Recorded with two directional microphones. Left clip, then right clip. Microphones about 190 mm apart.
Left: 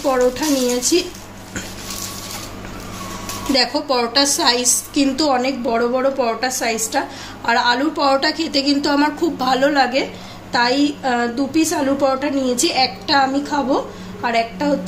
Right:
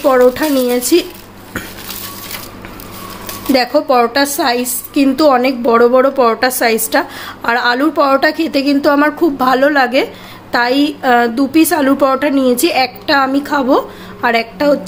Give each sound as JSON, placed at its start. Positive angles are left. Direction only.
{"t": 0.0, "sound": "a woman's voice", "side_deg": -50}
{"t": 3.5, "sound": "a woman's voice", "side_deg": -45}